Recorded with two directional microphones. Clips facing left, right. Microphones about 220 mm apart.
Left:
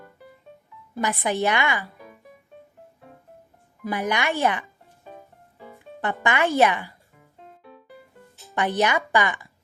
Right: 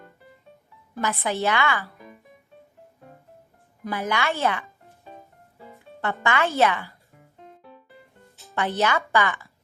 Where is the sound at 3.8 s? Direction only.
15° left (ahead or behind).